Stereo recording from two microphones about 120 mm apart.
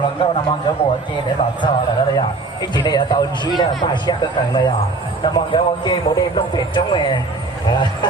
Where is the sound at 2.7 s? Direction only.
35° left (ahead or behind).